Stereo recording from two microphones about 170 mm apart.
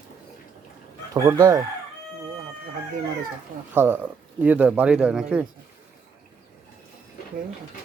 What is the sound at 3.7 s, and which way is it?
Speech, 10° right (ahead or behind).